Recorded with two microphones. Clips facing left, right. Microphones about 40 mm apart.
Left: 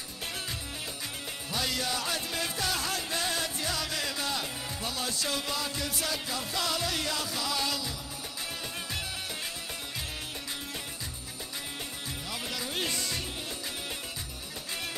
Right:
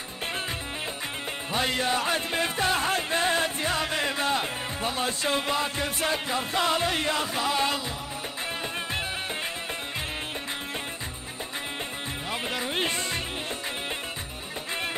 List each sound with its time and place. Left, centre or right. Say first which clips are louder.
1.5 s music: right 6 dB; right
12.3 s music: right 6 dB; right